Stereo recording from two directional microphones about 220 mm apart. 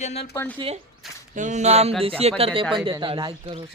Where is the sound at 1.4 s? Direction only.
35° right (ahead or behind).